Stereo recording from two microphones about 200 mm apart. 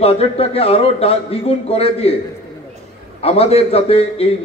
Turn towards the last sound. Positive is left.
turn(degrees=30)  # may be behind; listen again after turning